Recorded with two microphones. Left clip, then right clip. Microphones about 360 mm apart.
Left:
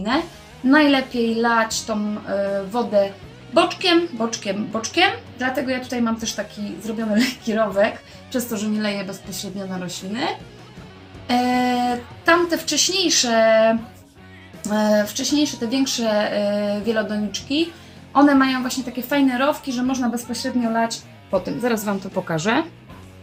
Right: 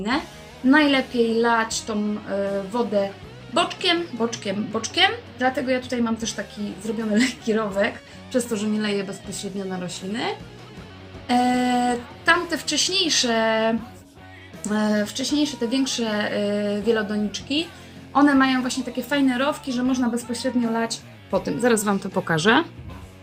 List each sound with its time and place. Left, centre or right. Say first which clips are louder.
0.7 s a woman's voice: left 2 dB; right